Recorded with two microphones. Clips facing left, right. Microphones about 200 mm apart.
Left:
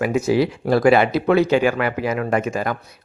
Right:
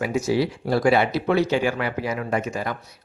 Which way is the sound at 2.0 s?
65° left (ahead or behind).